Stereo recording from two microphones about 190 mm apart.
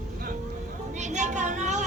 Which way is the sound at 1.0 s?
40° right (ahead or behind).